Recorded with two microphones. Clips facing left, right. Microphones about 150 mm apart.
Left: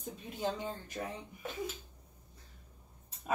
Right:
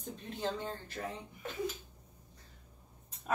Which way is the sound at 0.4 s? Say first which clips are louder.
Left 1 dB; 10° left (ahead or behind).